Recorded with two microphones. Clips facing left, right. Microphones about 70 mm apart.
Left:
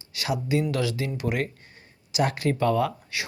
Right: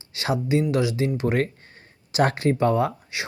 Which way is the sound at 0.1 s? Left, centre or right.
Right.